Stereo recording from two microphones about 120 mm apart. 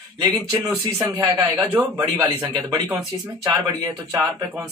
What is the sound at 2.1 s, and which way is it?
A man's voice, 30° right (ahead or behind).